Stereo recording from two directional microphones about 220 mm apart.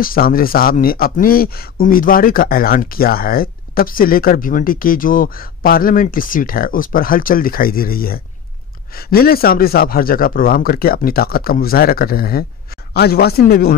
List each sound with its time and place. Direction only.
0.0 s speech: 40° left (ahead or behind)